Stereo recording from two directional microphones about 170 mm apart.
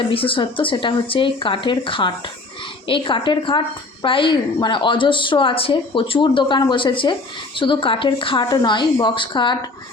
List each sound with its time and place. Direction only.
0.1 s a woman's voice: 30° left (ahead or behind)